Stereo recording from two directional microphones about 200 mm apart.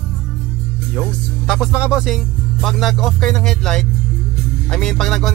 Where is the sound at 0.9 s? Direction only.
5° right (ahead or behind).